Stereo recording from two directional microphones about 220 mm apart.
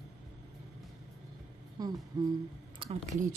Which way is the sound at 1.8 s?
15° right (ahead or behind).